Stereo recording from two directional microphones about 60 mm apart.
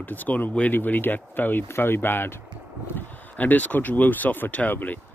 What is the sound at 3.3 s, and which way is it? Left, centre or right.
Speech, left.